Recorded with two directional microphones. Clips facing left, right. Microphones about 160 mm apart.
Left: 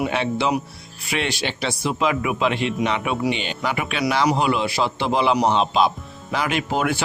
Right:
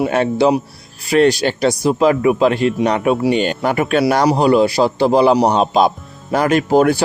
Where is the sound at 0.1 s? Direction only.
40° right (ahead or behind).